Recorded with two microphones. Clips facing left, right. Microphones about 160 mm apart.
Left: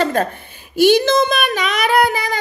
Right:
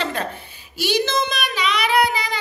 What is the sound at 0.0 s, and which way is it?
A woman's voice, 45° left (ahead or behind).